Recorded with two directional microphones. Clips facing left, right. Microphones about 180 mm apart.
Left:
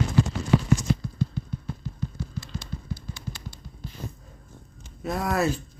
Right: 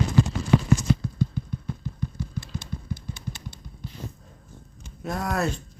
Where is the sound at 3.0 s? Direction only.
20° right (ahead or behind).